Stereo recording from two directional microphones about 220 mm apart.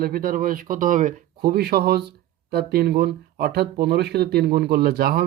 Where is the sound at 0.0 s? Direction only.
40° right (ahead or behind).